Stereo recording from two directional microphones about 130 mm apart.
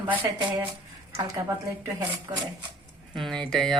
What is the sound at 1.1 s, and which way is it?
Speech, 25° right (ahead or behind).